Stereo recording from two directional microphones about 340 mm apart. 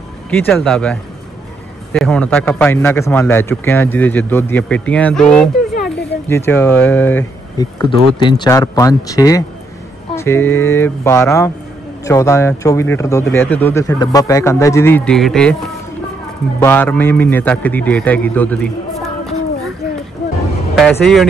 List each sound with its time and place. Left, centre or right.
0.3 s a man's voice: centre
16.5 s a man's voice: centre
20.7 s a man's voice: centre